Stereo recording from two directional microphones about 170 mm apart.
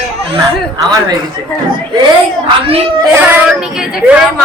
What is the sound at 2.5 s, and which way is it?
Speech, 35° right (ahead or behind).